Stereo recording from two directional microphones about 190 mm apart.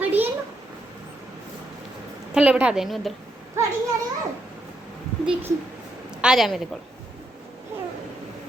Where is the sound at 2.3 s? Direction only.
5° right (ahead or behind).